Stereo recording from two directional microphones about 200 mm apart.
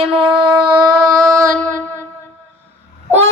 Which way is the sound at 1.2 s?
5° left (ahead or behind).